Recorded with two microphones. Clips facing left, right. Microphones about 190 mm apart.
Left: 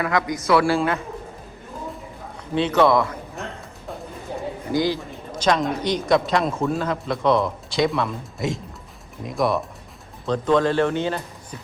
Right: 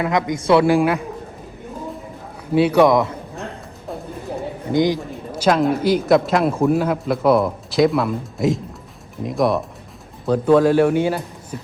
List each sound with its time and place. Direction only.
0.0 s a man's voice: 20° right (ahead or behind)
2.5 s speech: 10° right (ahead or behind)
4.7 s a man's voice: 20° right (ahead or behind)
5.3 s speech: 5° right (ahead or behind)